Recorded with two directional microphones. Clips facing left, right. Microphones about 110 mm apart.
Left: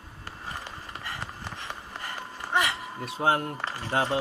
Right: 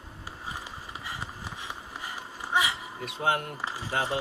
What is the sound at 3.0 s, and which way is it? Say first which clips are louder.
Speech: left 3 dB; 35° left (ahead or behind).